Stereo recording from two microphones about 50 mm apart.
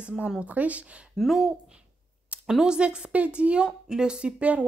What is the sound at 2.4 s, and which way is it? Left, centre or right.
A woman's voice, centre.